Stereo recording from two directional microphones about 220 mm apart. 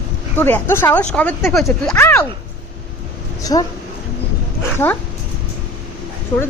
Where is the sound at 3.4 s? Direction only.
15° left (ahead or behind).